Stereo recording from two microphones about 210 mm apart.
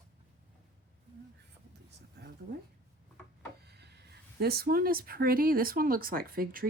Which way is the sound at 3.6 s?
50° right (ahead or behind).